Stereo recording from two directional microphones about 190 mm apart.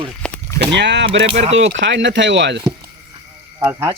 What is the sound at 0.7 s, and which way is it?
Speech, 65° right (ahead or behind).